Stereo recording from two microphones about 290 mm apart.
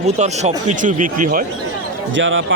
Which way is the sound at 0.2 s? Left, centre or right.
Right.